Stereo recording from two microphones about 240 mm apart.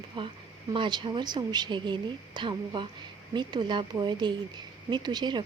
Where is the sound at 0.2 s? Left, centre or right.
Right.